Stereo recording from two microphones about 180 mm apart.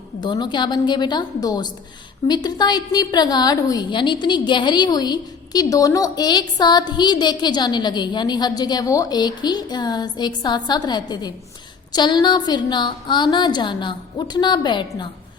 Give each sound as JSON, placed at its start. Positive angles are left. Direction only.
{"t": 0.2, "sound": "a woman's voice", "side_deg": 25}